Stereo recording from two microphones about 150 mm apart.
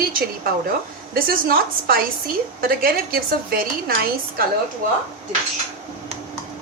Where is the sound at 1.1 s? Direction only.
85° right.